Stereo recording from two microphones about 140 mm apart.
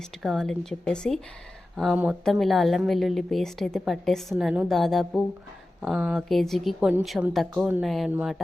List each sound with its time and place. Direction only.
0.2 s a woman's voice: centre (ahead or behind)